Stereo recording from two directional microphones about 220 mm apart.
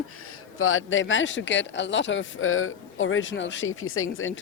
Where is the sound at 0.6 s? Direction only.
65° left (ahead or behind).